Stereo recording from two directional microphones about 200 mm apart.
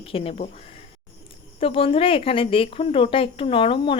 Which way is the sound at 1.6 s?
25° left (ahead or behind).